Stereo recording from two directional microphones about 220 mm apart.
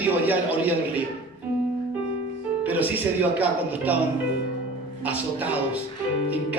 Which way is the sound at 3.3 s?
5° right (ahead or behind).